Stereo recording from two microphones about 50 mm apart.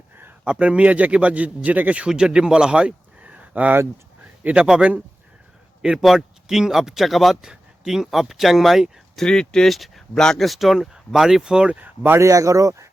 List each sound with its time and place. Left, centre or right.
0.6 s a man's voice: right
2.0 s speech: centre
4.5 s speech: centre
6.0 s speech: centre
9.1 s speech: centre
9.6 s speech: centre
10.2 s speech: centre
10.4 s speech: centre
11.7 s speech: right
12.2 s speech: right